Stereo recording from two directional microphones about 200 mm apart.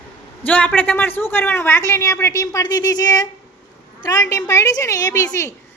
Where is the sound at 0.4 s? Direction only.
10° left (ahead or behind).